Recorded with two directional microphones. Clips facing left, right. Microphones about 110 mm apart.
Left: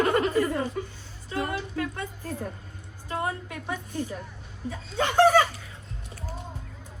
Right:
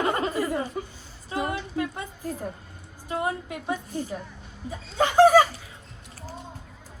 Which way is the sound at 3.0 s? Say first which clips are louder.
Right 2 dB; 20° right (ahead or behind).